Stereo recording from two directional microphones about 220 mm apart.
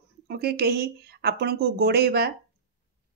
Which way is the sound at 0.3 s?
45° right (ahead or behind).